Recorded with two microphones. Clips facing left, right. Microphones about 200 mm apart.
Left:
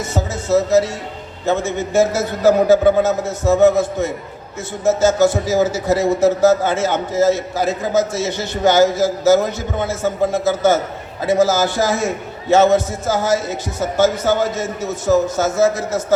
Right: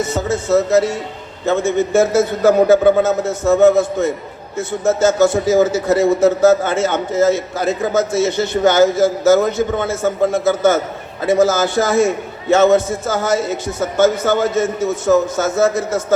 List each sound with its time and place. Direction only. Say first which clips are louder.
0.1 s a man's voice: left 2 dB; 50° right (ahead or behind)